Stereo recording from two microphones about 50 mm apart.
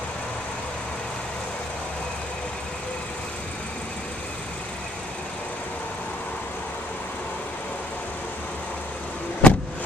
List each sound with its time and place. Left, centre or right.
9.4 s vehicle: left